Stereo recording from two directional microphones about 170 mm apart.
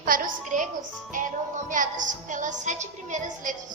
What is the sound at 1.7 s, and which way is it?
A woman's voice, 50° right (ahead or behind).